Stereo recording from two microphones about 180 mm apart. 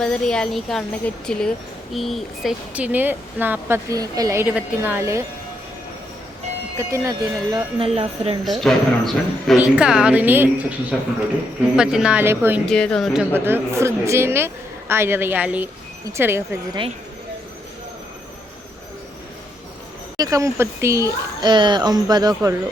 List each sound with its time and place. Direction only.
0.0 s speech: 5° left (ahead or behind); by 5.2 s 15° right (ahead or behind)
6.7 s speech: 15° right (ahead or behind)
7.8 s speech: 35° right (ahead or behind)
8.4 s a man's voice: centre (ahead or behind)
11.8 s speech: 5° right (ahead or behind)
12.6 s a man's voice: 5° left (ahead or behind)
13.3 s speech: 10° right (ahead or behind)
20.1 s speech: 20° right (ahead or behind)